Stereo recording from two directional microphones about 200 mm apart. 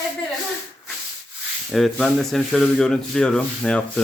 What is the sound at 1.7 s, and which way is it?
Speech, centre (ahead or behind).